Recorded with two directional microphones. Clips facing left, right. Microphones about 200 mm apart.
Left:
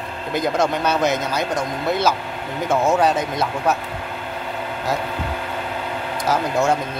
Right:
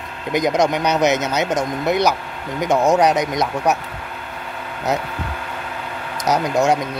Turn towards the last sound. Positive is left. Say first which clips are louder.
# right 2 dB
turn(degrees=-20)  # may be behind; listen again after turning